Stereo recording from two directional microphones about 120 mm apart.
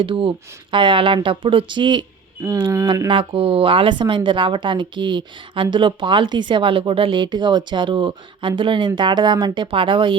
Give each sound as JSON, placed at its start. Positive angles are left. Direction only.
{"t": 0.0, "sound": "speech", "side_deg": -45}
{"t": 3.1, "sound": "speech", "side_deg": -45}